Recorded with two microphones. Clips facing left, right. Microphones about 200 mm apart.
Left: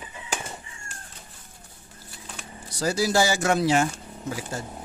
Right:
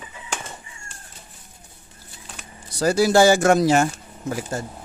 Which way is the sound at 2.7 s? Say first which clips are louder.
Right 6 dB; 60° right (ahead or behind).